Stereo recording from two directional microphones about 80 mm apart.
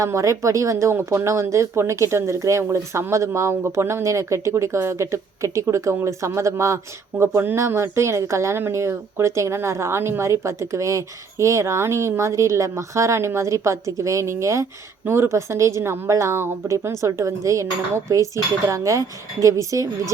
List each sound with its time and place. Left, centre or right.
0.0 s a woman's voice: right